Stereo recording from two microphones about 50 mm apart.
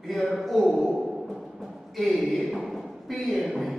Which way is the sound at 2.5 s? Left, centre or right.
Centre.